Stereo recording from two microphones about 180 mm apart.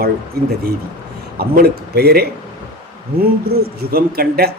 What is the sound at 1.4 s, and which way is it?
Speech, 60° right (ahead or behind).